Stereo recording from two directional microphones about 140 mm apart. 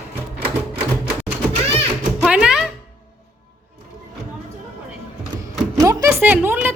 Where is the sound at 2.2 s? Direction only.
5° right (ahead or behind).